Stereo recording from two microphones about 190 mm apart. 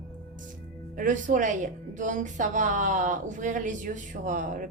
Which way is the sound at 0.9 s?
45° right (ahead or behind).